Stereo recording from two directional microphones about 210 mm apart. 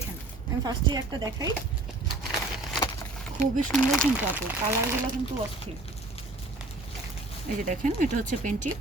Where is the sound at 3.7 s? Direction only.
5° left (ahead or behind).